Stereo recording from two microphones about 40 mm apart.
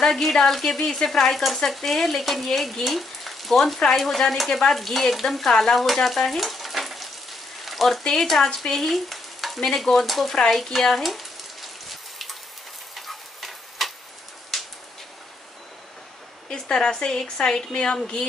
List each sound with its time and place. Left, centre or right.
0.1 s speech: centre
2.5 s frying: centre
3.9 s speech: centre
5.6 s frying: centre
8.0 s speech: centre
8.8 s stir: centre
9.6 s speech: centre
10.5 s frying: centre
14.5 s a sound: centre
16.4 s a woman's voice: centre